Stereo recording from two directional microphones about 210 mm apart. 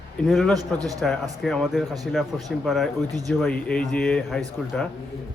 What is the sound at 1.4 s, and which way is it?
Speech, centre (ahead or behind).